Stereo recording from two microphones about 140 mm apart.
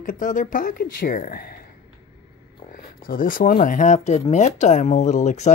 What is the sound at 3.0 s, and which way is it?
Speech, 80° left.